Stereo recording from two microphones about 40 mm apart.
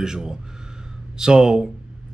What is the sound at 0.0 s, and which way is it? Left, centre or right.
A man's voice, centre.